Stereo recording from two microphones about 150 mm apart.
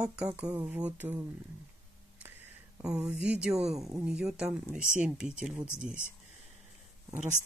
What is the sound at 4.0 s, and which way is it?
Speech, 5° right (ahead or behind).